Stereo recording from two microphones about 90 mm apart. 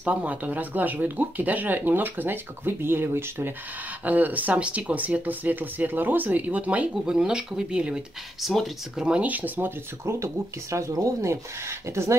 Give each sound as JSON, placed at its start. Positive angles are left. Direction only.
{"t": 0.0, "sound": "speech", "side_deg": -15}
{"t": 9.0, "sound": "speech", "side_deg": -15}
{"t": 10.1, "sound": "speech", "side_deg": -35}